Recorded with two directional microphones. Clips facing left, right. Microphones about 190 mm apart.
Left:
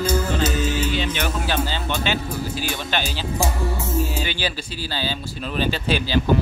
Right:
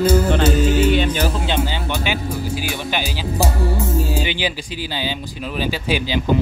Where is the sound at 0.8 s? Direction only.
60° right (ahead or behind).